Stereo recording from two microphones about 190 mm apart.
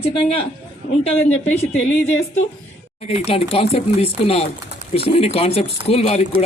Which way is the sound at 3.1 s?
30° left (ahead or behind).